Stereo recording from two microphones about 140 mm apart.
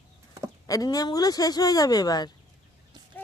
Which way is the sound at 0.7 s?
25° left (ahead or behind).